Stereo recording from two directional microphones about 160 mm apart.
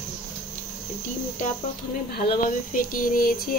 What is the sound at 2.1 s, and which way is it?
Speech, 65° left (ahead or behind).